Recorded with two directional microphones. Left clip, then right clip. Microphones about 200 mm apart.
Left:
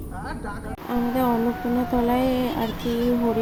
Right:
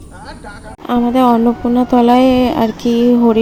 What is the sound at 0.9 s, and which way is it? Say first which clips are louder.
Speech: right 11 dB; 40° right (ahead or behind).